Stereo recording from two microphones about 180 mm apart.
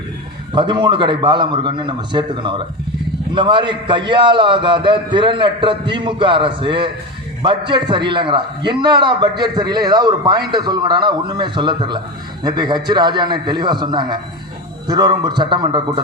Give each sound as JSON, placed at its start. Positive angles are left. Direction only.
{"t": 0.5, "sound": "a man's voice", "side_deg": -25}